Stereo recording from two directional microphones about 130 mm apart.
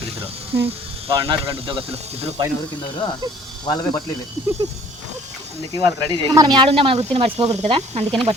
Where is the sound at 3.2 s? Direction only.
30° right (ahead or behind).